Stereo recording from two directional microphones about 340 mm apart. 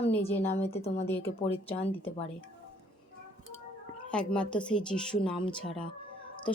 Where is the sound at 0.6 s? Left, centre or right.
Centre.